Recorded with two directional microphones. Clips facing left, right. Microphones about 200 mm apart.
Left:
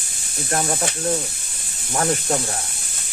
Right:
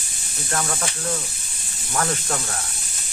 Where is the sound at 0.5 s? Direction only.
30° left (ahead or behind).